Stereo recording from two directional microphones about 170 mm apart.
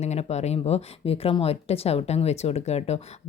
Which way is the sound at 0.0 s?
40° left (ahead or behind).